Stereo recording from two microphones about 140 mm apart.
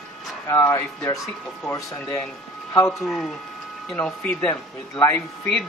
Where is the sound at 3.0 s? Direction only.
Centre (ahead or behind).